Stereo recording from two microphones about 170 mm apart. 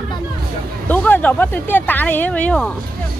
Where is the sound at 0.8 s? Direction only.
10° left (ahead or behind).